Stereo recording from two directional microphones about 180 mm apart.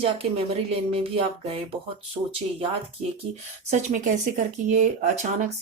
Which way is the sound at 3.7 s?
45° right (ahead or behind).